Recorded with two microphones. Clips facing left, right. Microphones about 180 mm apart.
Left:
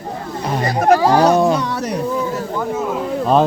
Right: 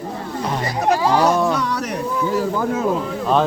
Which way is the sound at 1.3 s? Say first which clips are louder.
Left 4 dB; 20° left (ahead or behind).